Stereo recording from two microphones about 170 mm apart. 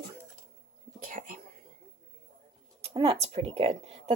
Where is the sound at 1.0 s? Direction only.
55° right (ahead or behind).